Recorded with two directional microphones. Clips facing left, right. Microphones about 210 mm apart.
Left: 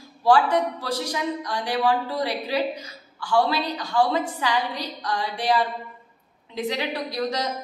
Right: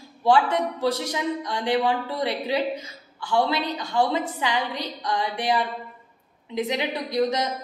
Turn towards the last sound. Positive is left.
turn(degrees=-20)  # may be behind; listen again after turning